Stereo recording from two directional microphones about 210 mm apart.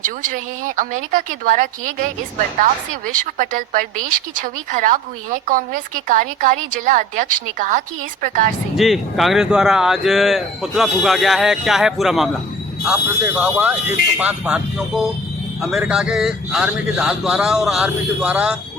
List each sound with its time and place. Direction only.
0.0 s speech: 40° right (ahead or behind)
3.3 s speech: 40° right (ahead or behind)
8.7 s speech: centre (ahead or behind)